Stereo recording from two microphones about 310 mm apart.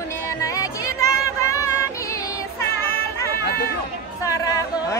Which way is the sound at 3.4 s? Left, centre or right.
Left.